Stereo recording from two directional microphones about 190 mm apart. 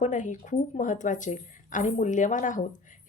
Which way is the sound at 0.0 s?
40° left (ahead or behind).